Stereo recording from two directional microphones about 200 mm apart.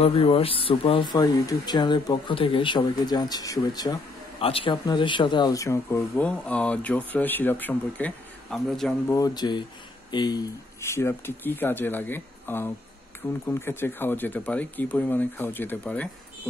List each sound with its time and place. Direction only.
0.0 s speech: 30° left (ahead or behind); by 8.9 s centre (ahead or behind)
9.1 s speech: 20° left (ahead or behind)